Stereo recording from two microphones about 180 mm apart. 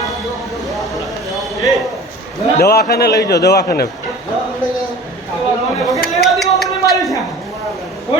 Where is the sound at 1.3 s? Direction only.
Centre (ahead or behind).